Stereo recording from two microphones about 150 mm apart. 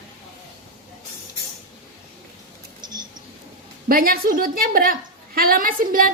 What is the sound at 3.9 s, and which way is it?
A woman's voice, 75° right (ahead or behind).